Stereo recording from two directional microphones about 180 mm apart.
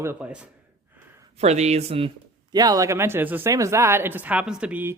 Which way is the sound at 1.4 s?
35° right (ahead or behind).